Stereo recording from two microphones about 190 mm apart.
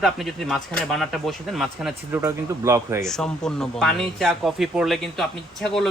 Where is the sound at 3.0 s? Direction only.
5° left (ahead or behind).